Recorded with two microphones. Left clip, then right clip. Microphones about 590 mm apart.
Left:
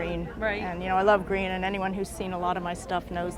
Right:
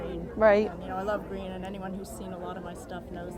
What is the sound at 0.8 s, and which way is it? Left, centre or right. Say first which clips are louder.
A woman's voice: left 9 dB; left.